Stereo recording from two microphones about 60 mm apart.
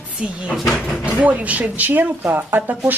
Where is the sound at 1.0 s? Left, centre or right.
Right.